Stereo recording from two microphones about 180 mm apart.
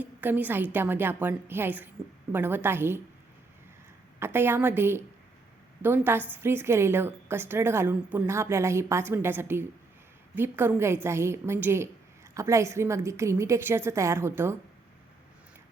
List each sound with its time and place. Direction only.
0.0 s a woman's voice: 10° right (ahead or behind)
4.2 s a woman's voice: 10° right (ahead or behind)